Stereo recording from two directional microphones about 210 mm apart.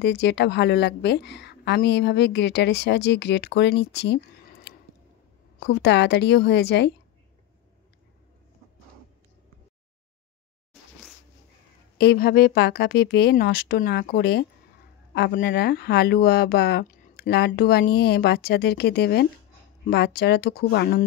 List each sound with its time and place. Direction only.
0.0 s a woman's voice: 55° left (ahead or behind)
5.6 s a woman's voice: 50° left (ahead or behind)
10.7 s insect: centre (ahead or behind)
12.0 s a woman's voice: 50° left (ahead or behind)